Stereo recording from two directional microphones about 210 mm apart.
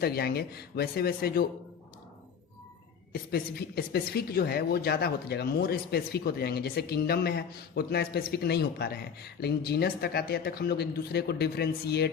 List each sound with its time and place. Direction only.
0.0 s a woman's voice: 50° left (ahead or behind)
3.1 s a woman's voice: 45° left (ahead or behind)